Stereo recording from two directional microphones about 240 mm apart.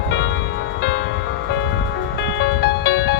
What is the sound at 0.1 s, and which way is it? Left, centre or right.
Music, left.